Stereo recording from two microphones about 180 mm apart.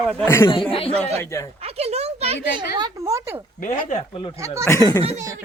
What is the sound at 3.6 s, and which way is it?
Speech, 40° left (ahead or behind).